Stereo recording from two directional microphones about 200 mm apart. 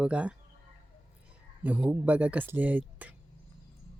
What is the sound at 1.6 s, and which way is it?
Speech, 10° right (ahead or behind).